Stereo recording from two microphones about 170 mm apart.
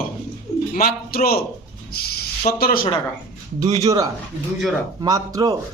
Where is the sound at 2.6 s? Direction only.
60° left (ahead or behind).